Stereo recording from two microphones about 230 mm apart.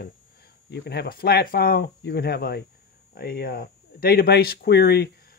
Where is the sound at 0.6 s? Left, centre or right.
Left.